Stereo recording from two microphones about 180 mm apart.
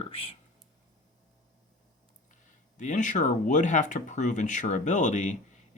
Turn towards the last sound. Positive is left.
turn(degrees=40)  # may be behind; listen again after turning